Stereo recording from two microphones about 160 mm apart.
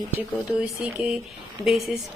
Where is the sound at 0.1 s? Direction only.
10° right (ahead or behind).